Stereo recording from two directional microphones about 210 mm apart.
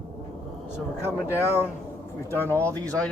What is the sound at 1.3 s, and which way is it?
Speech, 10° left (ahead or behind).